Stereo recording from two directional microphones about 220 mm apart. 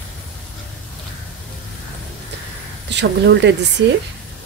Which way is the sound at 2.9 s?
55° right (ahead or behind).